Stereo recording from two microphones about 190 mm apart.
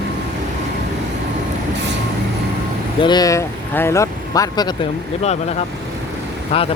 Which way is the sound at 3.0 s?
20° left (ahead or behind).